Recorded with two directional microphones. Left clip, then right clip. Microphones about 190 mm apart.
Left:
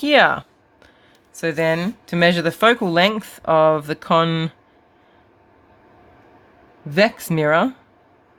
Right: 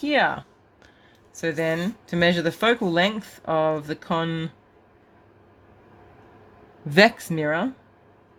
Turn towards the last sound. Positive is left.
turn(degrees=30)  # may be behind; listen again after turning